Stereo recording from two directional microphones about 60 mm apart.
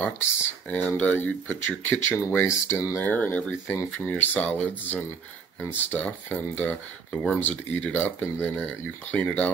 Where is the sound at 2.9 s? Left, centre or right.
Left.